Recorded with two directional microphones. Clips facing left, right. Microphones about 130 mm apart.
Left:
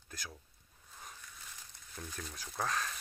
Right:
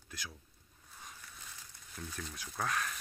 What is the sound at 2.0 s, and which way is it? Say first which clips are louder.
Speech: right 1 dB; 35° left (ahead or behind).